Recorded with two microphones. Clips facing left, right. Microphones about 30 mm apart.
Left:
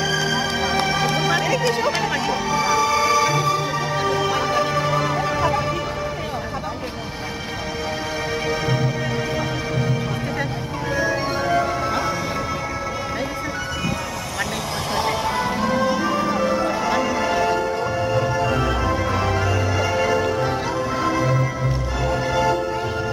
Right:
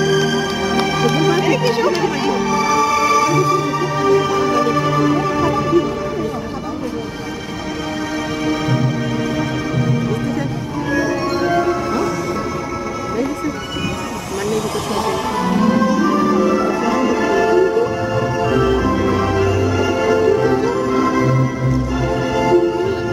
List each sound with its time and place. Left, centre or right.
0.0 s music: centre
8.5 s music: centre
11.0 s music: centre
15.0 s music: centre
15.5 s music: centre
17.0 s music: centre
20.4 s music: centre